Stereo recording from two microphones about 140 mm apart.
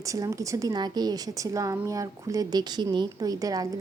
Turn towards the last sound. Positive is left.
turn(degrees=-25)  # may be behind; listen again after turning